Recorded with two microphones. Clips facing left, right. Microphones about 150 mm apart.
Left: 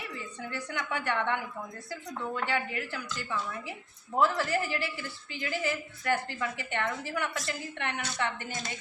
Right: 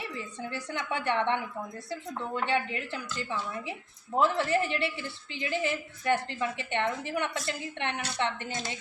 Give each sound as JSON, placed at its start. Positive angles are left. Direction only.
{"t": 0.3, "sound": "a woman's voice", "side_deg": -25}